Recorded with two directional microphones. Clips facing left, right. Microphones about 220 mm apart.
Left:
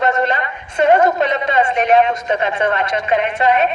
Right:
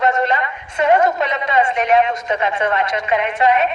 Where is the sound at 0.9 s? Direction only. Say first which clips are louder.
Left 2 dB; 30° left (ahead or behind).